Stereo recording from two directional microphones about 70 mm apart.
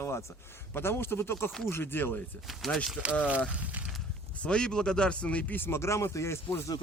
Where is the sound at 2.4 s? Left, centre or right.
Centre.